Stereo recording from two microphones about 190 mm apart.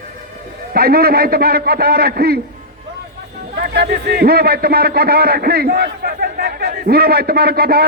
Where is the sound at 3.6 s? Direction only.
50° right (ahead or behind).